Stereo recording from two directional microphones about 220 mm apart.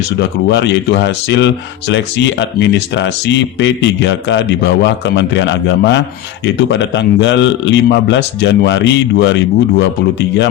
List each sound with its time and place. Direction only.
0.2 s a man's voice: 50° left (ahead or behind)